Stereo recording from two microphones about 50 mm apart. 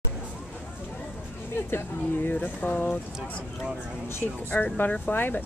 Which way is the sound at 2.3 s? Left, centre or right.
Left.